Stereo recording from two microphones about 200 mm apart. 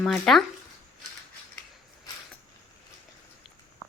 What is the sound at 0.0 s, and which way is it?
Speech, centre (ahead or behind).